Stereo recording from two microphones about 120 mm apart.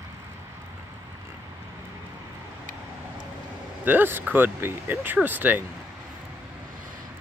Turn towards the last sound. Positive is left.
turn(degrees=-15)  # may be behind; listen again after turning